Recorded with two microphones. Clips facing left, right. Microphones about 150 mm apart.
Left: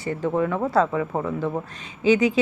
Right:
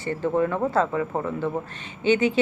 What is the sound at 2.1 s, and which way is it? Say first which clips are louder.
Speech: left 2 dB; 90° left.